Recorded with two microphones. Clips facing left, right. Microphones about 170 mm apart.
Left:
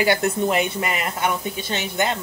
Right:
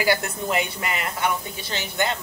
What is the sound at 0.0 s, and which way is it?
A woman's voice, 25° left (ahead or behind).